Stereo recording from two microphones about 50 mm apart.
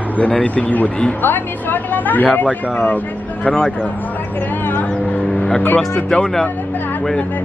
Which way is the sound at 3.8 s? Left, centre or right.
Left.